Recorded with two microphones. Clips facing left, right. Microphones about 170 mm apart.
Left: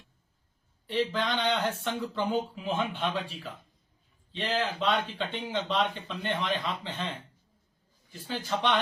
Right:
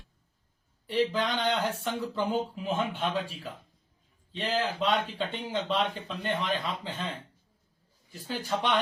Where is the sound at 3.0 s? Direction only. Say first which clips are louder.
Right 1 dB; 45° right (ahead or behind).